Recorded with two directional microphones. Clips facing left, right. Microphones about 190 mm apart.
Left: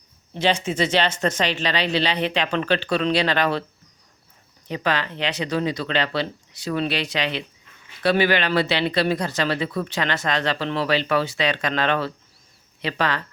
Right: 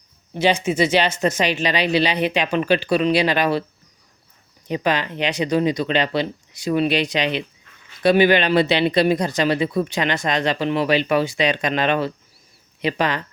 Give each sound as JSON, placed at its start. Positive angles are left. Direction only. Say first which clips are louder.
{"t": 0.3, "sound": "speech", "louder": "right 3 dB", "side_deg": -10}
{"t": 4.7, "sound": "speech", "louder": "right 3 dB", "side_deg": -15}